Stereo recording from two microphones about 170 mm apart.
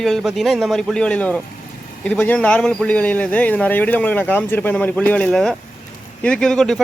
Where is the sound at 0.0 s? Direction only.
Centre (ahead or behind).